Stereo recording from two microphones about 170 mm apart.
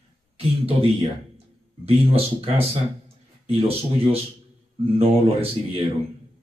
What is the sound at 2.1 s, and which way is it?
Speech, 35° right (ahead or behind).